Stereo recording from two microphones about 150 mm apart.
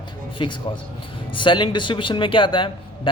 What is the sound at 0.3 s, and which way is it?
A man's voice, 30° left (ahead or behind).